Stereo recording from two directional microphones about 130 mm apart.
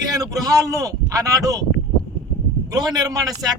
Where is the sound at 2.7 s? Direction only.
30° right (ahead or behind).